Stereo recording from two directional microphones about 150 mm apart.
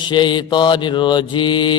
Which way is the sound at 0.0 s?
30° left (ahead or behind).